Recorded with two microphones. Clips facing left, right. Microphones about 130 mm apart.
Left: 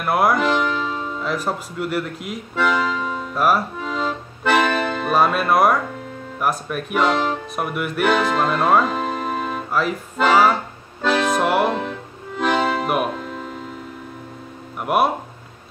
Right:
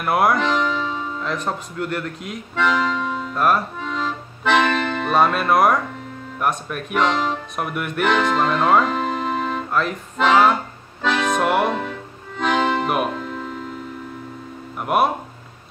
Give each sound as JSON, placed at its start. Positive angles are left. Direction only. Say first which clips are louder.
{"t": 0.0, "sound": "music", "louder": "even", "side_deg": 0}
{"t": 14.8, "sound": "speech", "louder": "even", "side_deg": 0}